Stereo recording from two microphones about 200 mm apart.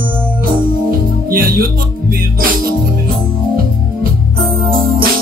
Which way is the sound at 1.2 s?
45° right (ahead or behind).